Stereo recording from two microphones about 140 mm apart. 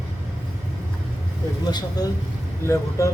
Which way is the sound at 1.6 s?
30° left (ahead or behind).